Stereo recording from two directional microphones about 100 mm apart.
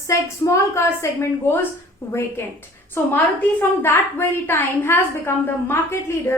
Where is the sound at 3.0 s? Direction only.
25° left (ahead or behind).